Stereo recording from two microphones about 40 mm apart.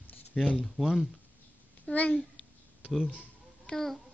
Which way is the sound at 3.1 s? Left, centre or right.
Left.